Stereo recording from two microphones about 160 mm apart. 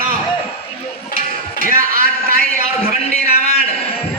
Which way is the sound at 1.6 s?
60° right (ahead or behind).